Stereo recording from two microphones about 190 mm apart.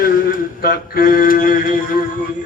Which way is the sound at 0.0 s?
45° left (ahead or behind).